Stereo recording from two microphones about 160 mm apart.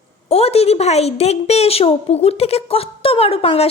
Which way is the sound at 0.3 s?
40° left (ahead or behind).